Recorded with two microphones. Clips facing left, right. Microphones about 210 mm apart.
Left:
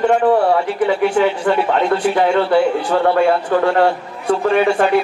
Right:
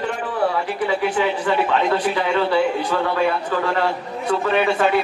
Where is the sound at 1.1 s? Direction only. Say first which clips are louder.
Left 5 dB; 50° left (ahead or behind).